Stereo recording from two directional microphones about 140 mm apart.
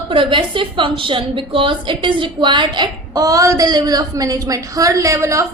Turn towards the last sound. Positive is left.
turn(degrees=-20)  # may be behind; listen again after turning